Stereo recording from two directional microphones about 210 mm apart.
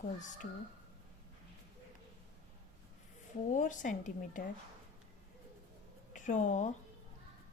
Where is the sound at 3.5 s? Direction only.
35° left (ahead or behind).